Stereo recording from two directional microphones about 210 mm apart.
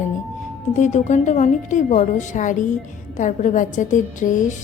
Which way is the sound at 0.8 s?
35° left (ahead or behind).